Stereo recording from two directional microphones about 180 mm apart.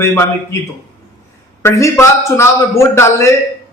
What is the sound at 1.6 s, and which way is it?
A man's voice, 15° left (ahead or behind).